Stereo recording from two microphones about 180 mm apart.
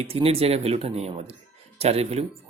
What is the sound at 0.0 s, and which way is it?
Speech, 35° right (ahead or behind).